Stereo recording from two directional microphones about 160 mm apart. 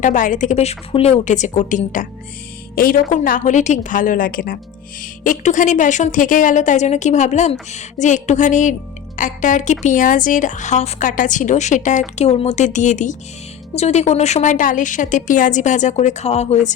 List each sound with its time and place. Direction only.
0.0 s speech: 55° left (ahead or behind)
2.7 s a woman's voice: 65° left (ahead or behind)
5.2 s speech: 50° left (ahead or behind)